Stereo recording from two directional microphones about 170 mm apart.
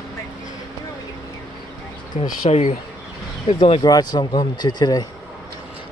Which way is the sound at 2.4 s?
40° left (ahead or behind).